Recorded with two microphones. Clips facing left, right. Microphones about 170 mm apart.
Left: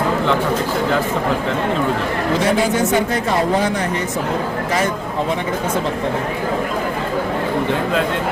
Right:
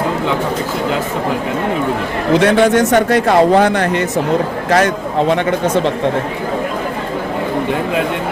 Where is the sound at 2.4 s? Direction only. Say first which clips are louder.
Right 6 dB; 70° right (ahead or behind).